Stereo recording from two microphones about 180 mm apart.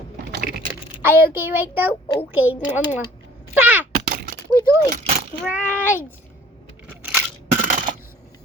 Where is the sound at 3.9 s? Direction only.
50° right (ahead or behind).